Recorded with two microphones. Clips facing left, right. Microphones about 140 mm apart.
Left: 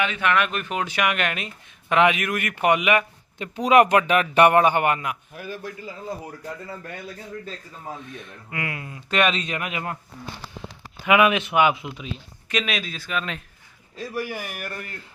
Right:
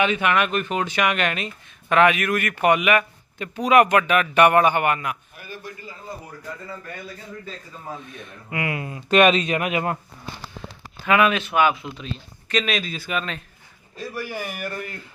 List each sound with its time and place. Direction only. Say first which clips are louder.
0.0 s speech: right 2 dB; 15° right (ahead or behind); by 5.1 s 25° left (ahead or behind)
8.4 s a man's voice: right 5 dB; 20° right (ahead or behind)
11.0 s speech: left 1 dB; 15° left (ahead or behind); by 13.2 s 5° right (ahead or behind)
14.1 s speech: left 1 dB; 15° left (ahead or behind)